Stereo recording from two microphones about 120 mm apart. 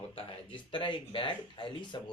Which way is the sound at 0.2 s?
45° left (ahead or behind).